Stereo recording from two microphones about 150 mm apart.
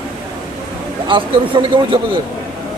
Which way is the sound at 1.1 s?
35° right (ahead or behind).